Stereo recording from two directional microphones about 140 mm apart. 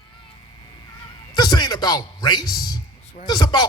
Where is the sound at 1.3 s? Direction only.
30° left (ahead or behind).